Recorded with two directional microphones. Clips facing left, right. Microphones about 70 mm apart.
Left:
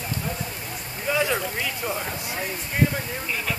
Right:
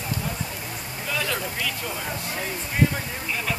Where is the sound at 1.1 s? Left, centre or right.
Centre.